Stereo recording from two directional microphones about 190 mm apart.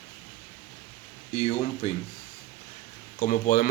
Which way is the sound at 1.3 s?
35° left (ahead or behind).